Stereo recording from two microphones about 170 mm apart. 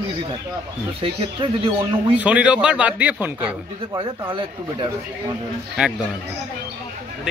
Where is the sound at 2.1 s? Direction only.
5° right (ahead or behind).